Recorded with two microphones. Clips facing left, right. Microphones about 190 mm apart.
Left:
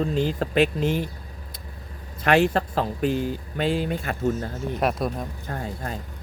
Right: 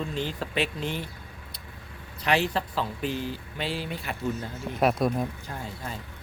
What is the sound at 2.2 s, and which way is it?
Speech, 50° left (ahead or behind).